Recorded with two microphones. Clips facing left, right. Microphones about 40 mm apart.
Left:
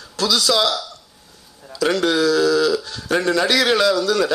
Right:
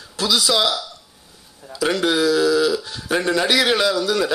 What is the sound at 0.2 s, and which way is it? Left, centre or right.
A man's voice, centre.